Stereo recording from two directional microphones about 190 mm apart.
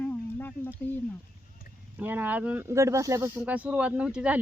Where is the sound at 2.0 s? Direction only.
10° right (ahead or behind).